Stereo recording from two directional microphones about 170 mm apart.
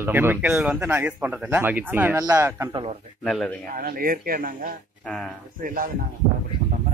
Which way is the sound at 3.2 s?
Centre (ahead or behind).